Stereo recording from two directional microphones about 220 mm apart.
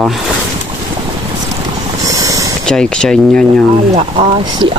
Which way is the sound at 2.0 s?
15° right (ahead or behind).